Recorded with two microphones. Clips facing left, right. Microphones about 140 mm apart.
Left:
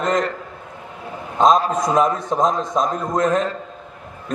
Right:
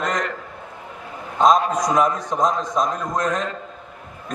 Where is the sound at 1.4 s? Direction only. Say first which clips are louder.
Left 1 dB; 30° left (ahead or behind).